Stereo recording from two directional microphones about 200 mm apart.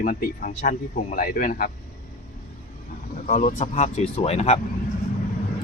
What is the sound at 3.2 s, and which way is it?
Speech, 40° left (ahead or behind).